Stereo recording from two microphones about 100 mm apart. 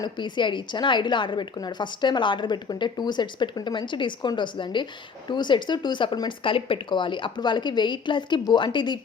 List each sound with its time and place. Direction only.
0.0 s a woman's voice: 50° left (ahead or behind)